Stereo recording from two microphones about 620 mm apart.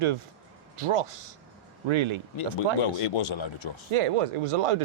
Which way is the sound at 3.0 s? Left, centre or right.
Left.